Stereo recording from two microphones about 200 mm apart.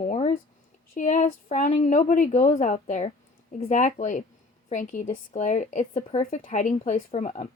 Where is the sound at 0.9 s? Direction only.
35° left (ahead or behind).